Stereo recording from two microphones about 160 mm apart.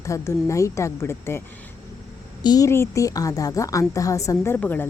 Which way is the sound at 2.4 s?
25° left (ahead or behind).